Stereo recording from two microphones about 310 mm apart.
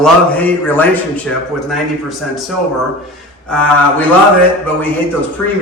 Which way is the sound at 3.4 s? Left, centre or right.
Centre.